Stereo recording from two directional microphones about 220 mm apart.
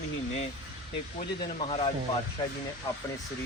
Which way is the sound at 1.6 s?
25° left (ahead or behind).